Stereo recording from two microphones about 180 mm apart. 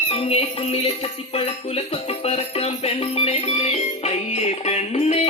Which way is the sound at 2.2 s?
35° left (ahead or behind).